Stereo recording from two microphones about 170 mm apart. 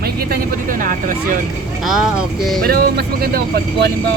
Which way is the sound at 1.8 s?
5° right (ahead or behind).